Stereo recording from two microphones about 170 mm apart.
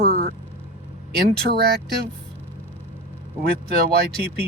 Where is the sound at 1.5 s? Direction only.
70° right (ahead or behind).